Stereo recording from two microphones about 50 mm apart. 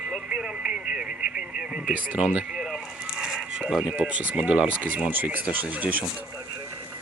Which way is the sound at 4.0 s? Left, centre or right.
Right.